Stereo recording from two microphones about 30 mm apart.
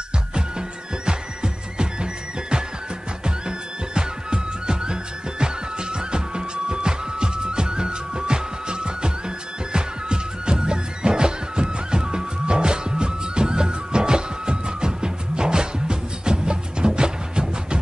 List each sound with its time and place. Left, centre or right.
0.3 s music: right
3.3 s music: right